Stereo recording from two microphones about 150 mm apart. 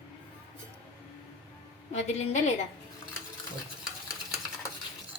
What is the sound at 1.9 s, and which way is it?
Speech, 50° left (ahead or behind).